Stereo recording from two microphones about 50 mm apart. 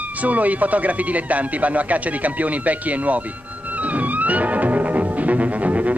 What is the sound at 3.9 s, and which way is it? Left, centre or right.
Music, right.